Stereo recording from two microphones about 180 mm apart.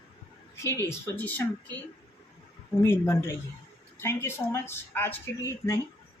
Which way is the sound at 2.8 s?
15° left (ahead or behind).